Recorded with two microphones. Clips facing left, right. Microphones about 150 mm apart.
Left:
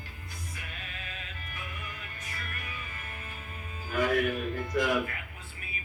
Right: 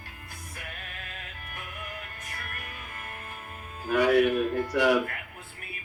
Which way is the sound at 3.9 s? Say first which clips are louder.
Right 6 dB; 75° right (ahead or behind).